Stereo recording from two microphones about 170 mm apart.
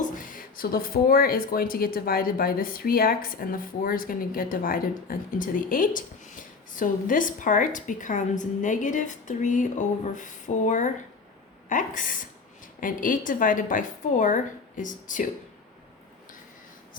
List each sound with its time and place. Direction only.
0.0 s a woman's voice: 55° left (ahead or behind)